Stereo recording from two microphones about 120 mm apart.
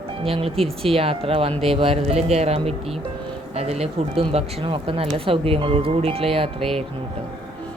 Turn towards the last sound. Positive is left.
turn(degrees=-50)  # may be behind; listen again after turning